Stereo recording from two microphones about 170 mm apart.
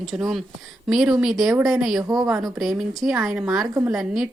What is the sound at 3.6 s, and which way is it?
Speech, 20° right (ahead or behind).